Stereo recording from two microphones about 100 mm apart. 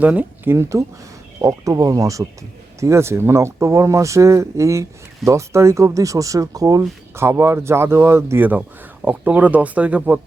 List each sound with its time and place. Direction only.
0.0 s speech: 15° right (ahead or behind)
0.5 s speech: 30° right (ahead or behind)
7.2 s speech: 25° right (ahead or behind)